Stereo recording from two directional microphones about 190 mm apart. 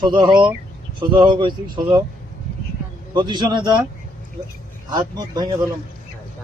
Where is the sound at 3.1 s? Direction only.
25° right (ahead or behind).